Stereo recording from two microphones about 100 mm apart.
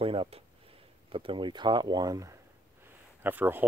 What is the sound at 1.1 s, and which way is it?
Speech, 60° right (ahead or behind).